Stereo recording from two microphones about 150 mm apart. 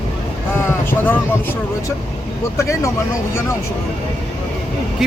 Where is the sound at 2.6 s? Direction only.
20° left (ahead or behind).